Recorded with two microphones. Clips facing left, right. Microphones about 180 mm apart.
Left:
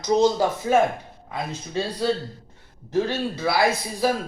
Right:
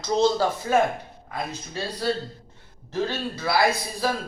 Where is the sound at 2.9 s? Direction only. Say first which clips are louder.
Left 4 dB; 15° left (ahead or behind).